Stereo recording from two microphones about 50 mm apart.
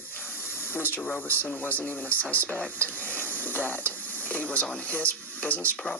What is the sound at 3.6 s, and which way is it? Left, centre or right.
Speech, left.